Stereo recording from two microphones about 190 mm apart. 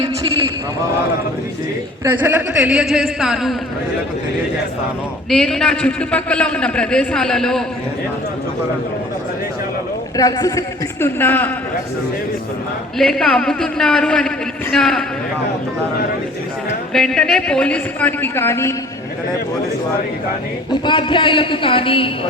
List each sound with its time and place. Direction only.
2.0 s a man's voice: 10° right (ahead or behind)
5.3 s a man's voice: 5° left (ahead or behind)
10.2 s a man's voice: 20° left (ahead or behind)
13.0 s a man's voice: 5° left (ahead or behind)
16.9 s a man's voice: 5° left (ahead or behind)
20.8 s speech: 25° left (ahead or behind)